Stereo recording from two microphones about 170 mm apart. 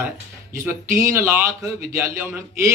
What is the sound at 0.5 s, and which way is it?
A man's voice, 15° right (ahead or behind).